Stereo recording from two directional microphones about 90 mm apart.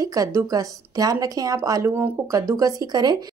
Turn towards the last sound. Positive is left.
turn(degrees=-50)  # may be behind; listen again after turning